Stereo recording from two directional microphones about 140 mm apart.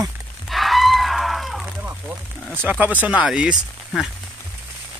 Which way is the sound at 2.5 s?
10° right (ahead or behind).